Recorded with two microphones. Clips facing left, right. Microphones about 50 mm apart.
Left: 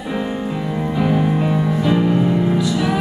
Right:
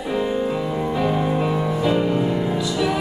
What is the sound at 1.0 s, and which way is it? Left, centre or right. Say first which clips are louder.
Music: left 4 dB; centre.